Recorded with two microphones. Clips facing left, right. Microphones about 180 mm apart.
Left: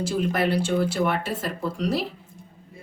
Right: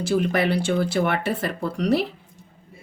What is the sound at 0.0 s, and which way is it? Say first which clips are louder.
Speech: right 2 dB; 65° right (ahead or behind).